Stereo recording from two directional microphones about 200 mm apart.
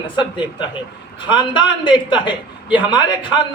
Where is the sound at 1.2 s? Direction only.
25° left (ahead or behind).